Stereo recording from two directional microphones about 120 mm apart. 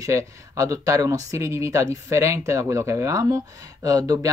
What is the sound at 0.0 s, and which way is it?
Speech, 30° right (ahead or behind).